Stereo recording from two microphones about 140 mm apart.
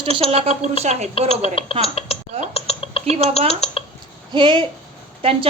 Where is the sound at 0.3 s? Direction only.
45° right (ahead or behind).